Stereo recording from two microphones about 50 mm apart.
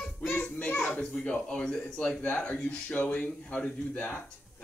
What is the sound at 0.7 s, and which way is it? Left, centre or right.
Speech, left.